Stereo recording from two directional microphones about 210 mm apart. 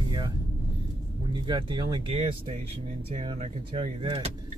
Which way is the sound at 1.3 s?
20° right (ahead or behind).